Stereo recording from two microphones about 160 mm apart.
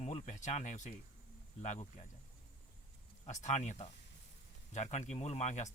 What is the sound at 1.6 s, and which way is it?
Speech, 45° left (ahead or behind).